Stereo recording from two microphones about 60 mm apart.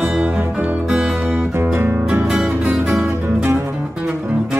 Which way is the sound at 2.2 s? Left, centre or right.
Centre.